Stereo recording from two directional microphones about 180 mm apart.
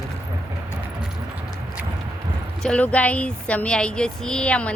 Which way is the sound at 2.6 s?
5° left (ahead or behind).